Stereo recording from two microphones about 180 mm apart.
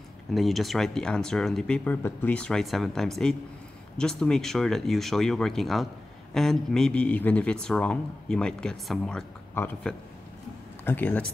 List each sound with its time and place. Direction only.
0.3 s speech: centre (ahead or behind)